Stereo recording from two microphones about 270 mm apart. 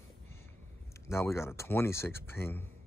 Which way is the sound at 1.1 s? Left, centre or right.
Centre.